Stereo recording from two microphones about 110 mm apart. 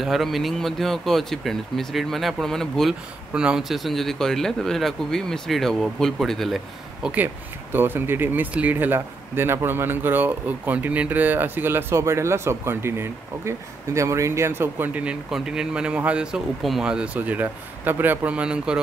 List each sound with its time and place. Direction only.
0.0 s speech: centre (ahead or behind)
7.7 s speech: 20° right (ahead or behind)